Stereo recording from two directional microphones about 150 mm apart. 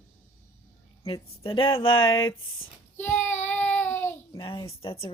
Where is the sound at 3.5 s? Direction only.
10° left (ahead or behind).